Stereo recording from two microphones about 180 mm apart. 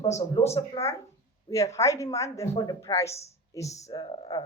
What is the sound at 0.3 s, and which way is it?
Speech, 15° left (ahead or behind).